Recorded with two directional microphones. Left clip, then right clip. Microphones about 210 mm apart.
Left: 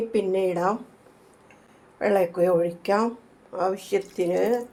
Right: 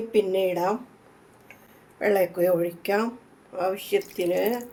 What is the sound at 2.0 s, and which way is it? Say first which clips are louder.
Speech: left 1 dB; 10° left (ahead or behind).